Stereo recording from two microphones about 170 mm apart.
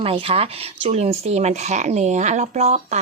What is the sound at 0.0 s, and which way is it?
Speech, 35° right (ahead or behind).